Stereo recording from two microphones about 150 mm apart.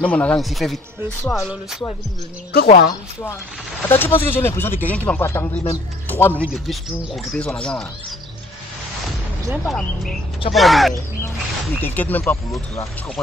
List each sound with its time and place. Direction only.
0.0 s speech: 10° left (ahead or behind)
2.5 s a woman's voice: 90° left
3.9 s speech: 15° left (ahead or behind)
9.5 s speech: centre (ahead or behind)
11.2 s speech: 15° left (ahead or behind)